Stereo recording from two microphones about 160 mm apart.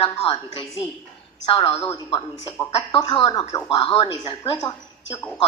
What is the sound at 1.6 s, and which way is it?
A woman's voice, 15° left (ahead or behind).